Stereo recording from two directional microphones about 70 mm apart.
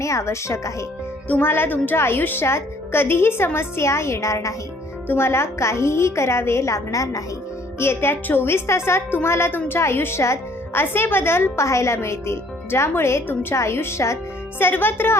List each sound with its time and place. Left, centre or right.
0.0 s speech: left
1.3 s a woman's voice: left
5.0 s a woman's voice: left
7.8 s a woman's voice: left
14.6 s a woman's voice: left